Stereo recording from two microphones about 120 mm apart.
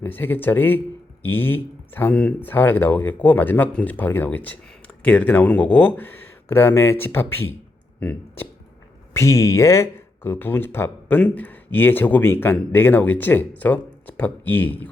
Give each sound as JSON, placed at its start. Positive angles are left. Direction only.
{"t": 0.0, "sound": "speech", "side_deg": 15}